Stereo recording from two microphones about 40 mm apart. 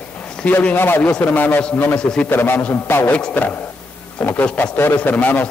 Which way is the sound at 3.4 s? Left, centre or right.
Left.